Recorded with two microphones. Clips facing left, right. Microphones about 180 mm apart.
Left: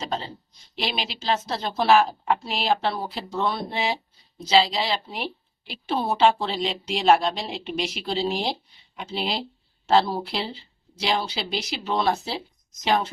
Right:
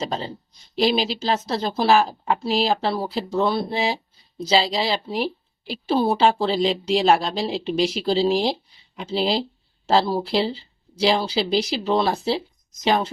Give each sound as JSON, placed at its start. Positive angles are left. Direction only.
{"t": 0.8, "sound": "a woman's voice", "side_deg": -40}